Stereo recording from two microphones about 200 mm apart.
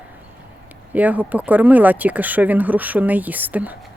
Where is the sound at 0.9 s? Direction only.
10° right (ahead or behind).